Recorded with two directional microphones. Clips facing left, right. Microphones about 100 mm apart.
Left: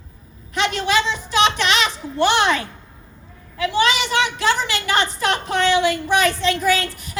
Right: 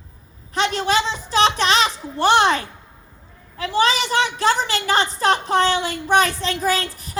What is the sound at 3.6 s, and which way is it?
A woman's voice, 35° right (ahead or behind).